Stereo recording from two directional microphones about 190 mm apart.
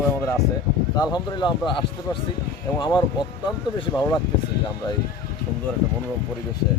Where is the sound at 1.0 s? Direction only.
20° left (ahead or behind).